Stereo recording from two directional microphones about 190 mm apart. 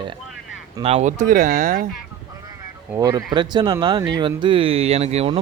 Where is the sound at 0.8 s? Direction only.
35° right (ahead or behind).